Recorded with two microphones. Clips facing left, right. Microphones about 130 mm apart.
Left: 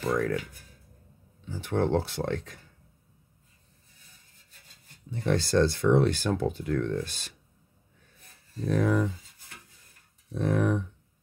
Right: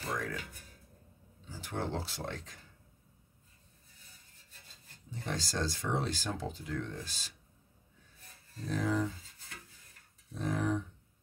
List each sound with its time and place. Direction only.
0.0 s a sound: 55° left (ahead or behind)
1.4 s speech: 60° left (ahead or behind)
5.1 s speech: 60° left (ahead or behind)
8.6 s speech: 60° left (ahead or behind)
10.3 s speech: 60° left (ahead or behind)